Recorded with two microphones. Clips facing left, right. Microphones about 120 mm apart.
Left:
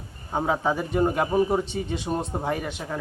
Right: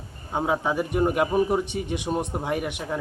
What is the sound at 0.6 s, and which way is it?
Speech, 15° right (ahead or behind).